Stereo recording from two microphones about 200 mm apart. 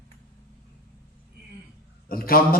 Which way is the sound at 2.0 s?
50° left (ahead or behind).